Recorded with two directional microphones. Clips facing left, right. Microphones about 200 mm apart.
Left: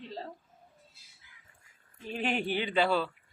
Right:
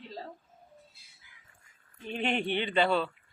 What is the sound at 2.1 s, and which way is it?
Speech, 5° left (ahead or behind).